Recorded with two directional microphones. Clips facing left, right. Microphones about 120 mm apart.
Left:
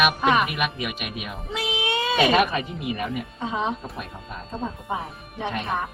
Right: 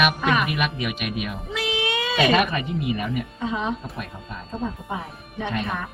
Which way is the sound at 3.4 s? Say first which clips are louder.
Left 1 dB; 25° left (ahead or behind).